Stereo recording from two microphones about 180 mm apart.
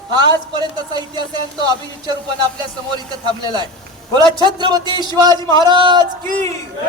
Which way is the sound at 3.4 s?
25° right (ahead or behind).